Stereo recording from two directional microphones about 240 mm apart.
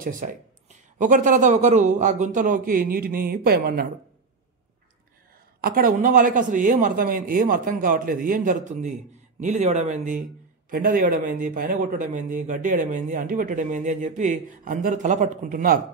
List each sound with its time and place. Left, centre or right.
0.0 s a man's voice: right
5.6 s a man's voice: right